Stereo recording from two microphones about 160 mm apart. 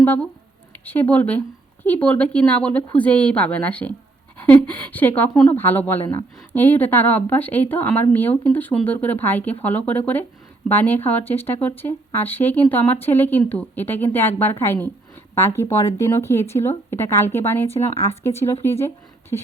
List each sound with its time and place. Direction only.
0.0 s speech: 10° left (ahead or behind)